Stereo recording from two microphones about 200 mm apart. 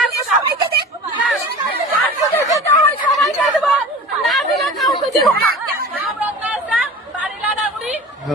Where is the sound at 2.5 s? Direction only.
15° left (ahead or behind).